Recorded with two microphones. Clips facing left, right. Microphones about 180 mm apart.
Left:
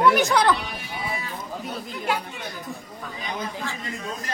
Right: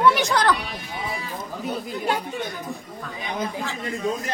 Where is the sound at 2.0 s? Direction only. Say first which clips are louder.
Right 2 dB; 40° right (ahead or behind).